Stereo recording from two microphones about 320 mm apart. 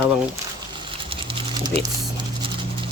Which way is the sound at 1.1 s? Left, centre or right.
Centre.